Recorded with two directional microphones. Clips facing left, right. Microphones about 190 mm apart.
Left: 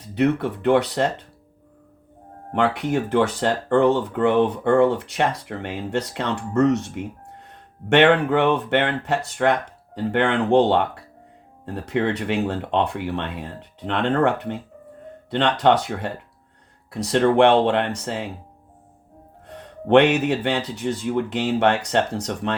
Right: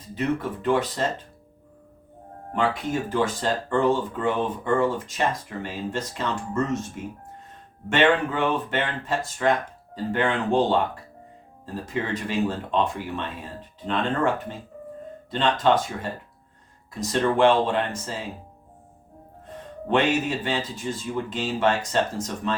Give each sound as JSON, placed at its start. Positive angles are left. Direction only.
{"t": 0.0, "sound": "speech", "side_deg": 70}
{"t": 2.5, "sound": "speech", "side_deg": 65}
{"t": 19.5, "sound": "speech", "side_deg": 70}